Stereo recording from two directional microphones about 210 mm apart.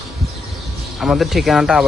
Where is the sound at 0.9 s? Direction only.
Centre (ahead or behind).